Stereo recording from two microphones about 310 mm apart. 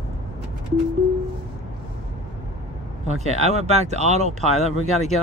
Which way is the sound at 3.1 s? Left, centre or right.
Right.